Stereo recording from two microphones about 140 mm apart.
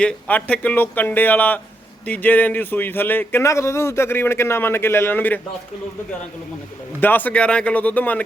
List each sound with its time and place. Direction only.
0.0 s speech: 10° left (ahead or behind)
7.0 s speech: 15° left (ahead or behind)